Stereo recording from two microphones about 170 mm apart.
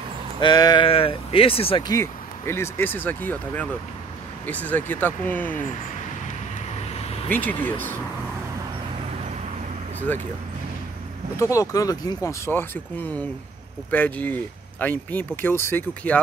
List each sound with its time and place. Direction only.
0.4 s speech: 25° left (ahead or behind)
7.3 s speech: 10° left (ahead or behind)
10.1 s speech: 10° left (ahead or behind)
11.3 s speech: 20° left (ahead or behind)
13.8 s speech: 10° left (ahead or behind)